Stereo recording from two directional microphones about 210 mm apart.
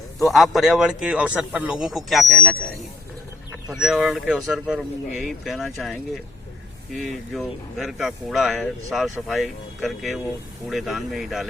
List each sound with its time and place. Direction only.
0.2 s speech: centre (ahead or behind)